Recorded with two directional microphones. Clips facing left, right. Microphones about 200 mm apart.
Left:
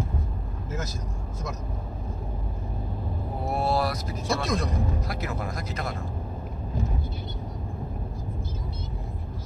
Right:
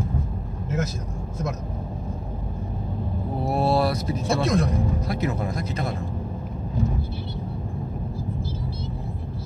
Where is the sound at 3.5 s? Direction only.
30° right (ahead or behind).